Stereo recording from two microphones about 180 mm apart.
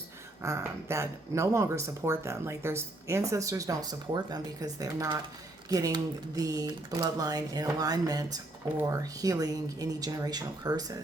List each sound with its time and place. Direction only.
0.4 s speech: 15° right (ahead or behind)